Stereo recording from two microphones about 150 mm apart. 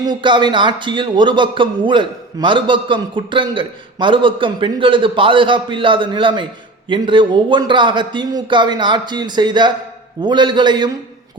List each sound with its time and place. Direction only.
0.0 s a man's voice: 30° right (ahead or behind)